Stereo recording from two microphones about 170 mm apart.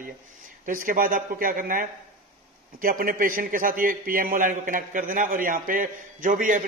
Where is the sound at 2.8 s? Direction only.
55° right (ahead or behind).